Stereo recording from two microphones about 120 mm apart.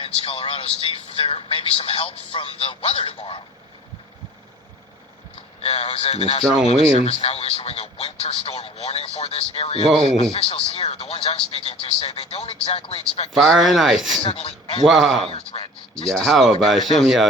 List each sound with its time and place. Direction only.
0.0 s speech: 55° left (ahead or behind)
5.6 s speech: 60° left (ahead or behind)
13.3 s speech: centre (ahead or behind)
14.3 s speech: 60° left (ahead or behind)
14.8 s speech: centre (ahead or behind)
15.3 s speech: 55° left (ahead or behind)
16.0 s speech: 5° left (ahead or behind)